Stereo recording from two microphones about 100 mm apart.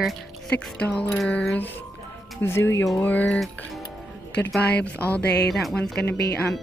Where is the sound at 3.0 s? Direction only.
15° left (ahead or behind).